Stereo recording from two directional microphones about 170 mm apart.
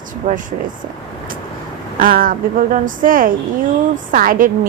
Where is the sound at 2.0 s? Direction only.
55° right (ahead or behind).